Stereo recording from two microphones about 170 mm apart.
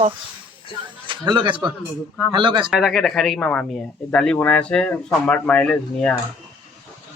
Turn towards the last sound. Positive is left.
turn(degrees=5)  # may be behind; listen again after turning